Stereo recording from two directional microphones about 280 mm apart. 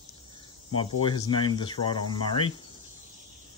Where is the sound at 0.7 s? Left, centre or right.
Centre.